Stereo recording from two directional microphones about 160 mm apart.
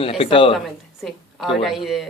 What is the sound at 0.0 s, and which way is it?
Speech, 35° left (ahead or behind).